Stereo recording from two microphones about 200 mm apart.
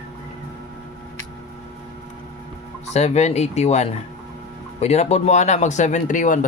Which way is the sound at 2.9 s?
35° left (ahead or behind).